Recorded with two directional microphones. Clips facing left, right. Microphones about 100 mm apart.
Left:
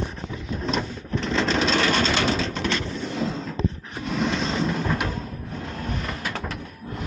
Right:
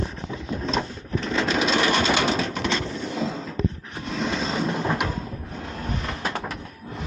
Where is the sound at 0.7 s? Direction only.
Centre (ahead or behind).